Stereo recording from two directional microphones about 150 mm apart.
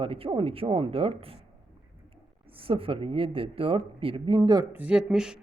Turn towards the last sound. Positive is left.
turn(degrees=-5)  # may be behind; listen again after turning